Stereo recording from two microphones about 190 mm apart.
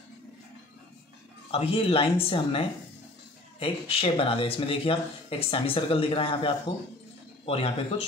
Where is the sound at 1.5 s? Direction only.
30° left (ahead or behind).